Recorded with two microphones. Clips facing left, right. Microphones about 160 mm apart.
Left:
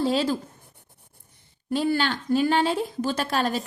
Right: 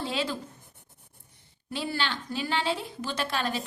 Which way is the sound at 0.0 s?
40° left (ahead or behind).